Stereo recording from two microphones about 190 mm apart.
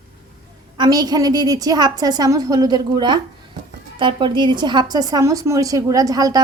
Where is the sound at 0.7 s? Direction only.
20° right (ahead or behind).